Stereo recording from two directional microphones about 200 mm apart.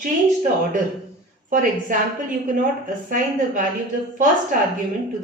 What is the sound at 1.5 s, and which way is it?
Speech, 40° right (ahead or behind).